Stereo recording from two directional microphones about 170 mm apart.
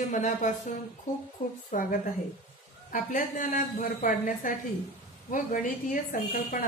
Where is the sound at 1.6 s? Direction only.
55° left (ahead or behind).